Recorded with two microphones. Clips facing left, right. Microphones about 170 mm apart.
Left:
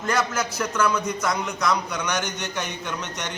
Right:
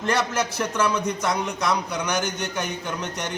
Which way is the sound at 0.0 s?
30° right (ahead or behind).